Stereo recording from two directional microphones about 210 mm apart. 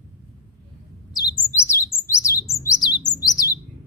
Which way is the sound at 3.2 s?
15° left (ahead or behind).